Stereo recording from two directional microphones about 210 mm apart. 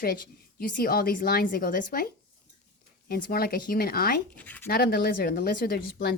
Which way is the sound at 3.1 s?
45° left (ahead or behind).